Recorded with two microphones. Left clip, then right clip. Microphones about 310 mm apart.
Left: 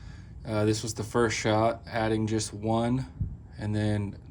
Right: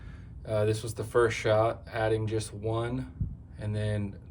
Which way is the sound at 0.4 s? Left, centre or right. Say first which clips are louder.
Left 1 dB; left.